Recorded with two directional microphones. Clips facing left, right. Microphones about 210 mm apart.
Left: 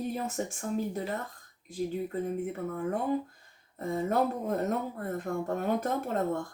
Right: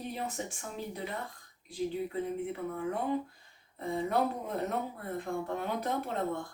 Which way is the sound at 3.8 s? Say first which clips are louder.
Left 3 dB; 45° left (ahead or behind).